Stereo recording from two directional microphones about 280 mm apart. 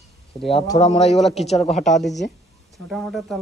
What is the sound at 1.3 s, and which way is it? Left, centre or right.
Speech, left.